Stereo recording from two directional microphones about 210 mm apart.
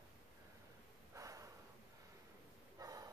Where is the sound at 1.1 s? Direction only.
15° right (ahead or behind).